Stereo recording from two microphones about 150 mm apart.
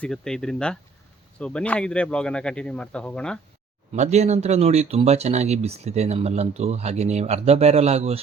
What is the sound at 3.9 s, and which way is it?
Speech, 45° right (ahead or behind).